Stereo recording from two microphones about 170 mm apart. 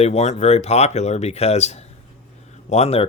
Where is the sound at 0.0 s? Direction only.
40° left (ahead or behind).